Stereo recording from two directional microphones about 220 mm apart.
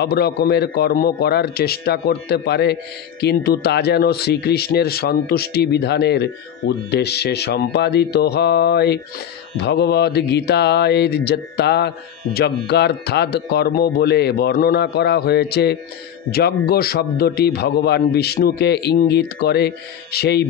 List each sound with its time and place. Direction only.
0.0 s a man's voice: 45° left (ahead or behind)